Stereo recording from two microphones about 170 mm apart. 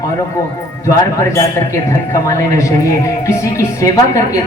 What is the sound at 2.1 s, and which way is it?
Speech, 20° left (ahead or behind).